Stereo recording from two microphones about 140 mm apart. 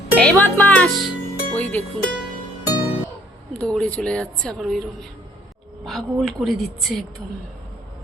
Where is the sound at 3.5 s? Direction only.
5° left (ahead or behind).